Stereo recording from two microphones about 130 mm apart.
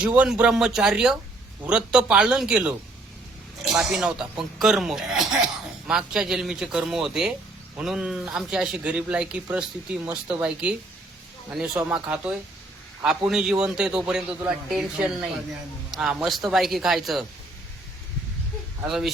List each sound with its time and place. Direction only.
0.0 s a man's voice: 10° right (ahead or behind)